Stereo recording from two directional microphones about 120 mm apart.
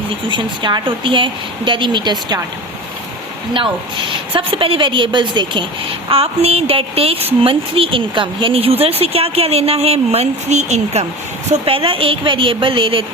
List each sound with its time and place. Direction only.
0.3 s a woman's voice: 40° right (ahead or behind)
3.5 s a woman's voice: 45° right (ahead or behind)
6.1 s a woman's voice: 55° right (ahead or behind); by 11.0 s 70° right (ahead or behind)
11.6 s a woman's voice: 50° right (ahead or behind)